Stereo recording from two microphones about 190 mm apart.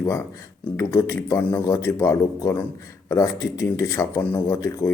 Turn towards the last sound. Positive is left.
turn(degrees=15)  # may be behind; listen again after turning